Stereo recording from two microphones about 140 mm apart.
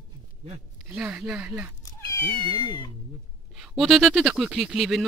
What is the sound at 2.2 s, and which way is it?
Speech, 40° right (ahead or behind).